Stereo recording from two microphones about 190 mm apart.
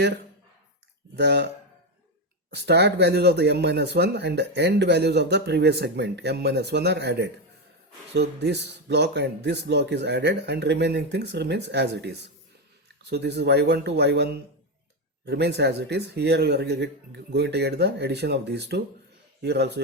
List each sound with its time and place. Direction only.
1.1 s speech: 60° right (ahead or behind)
2.5 s speech: 60° right (ahead or behind)